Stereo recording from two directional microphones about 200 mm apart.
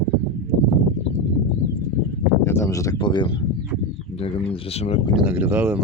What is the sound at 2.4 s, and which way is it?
Speech, 15° left (ahead or behind).